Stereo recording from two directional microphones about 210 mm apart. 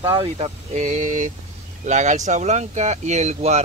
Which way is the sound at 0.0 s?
25° right (ahead or behind).